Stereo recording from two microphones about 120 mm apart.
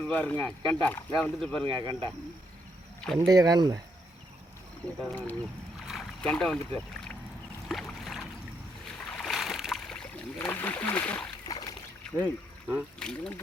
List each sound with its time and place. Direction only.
0.0 s speech: 10° left (ahead or behind)
1.6 s speech: 40° right (ahead or behind)
3.2 s speech: 30° right (ahead or behind)
5.0 s speech: 15° left (ahead or behind)
5.8 s boat: 5° right (ahead or behind)
6.2 s speech: 5° left (ahead or behind)
7.7 s boat: centre (ahead or behind)
9.1 s a sound: centre (ahead or behind)
11.4 s a sound: 30° left (ahead or behind)
12.2 s speech: 15° right (ahead or behind)
13.0 s speech: 5° left (ahead or behind)